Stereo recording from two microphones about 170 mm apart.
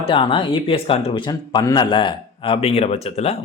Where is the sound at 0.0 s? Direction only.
30° left (ahead or behind).